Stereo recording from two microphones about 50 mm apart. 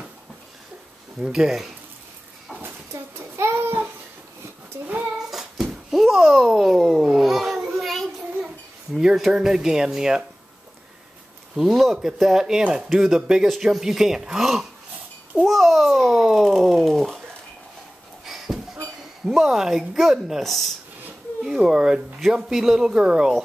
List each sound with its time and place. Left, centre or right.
1.2 s speech: centre
2.9 s a sound: right
5.3 s babbling: centre
8.9 s speech: centre
11.5 s a child's voice: centre
18.2 s a sound: centre
19.2 s speech: centre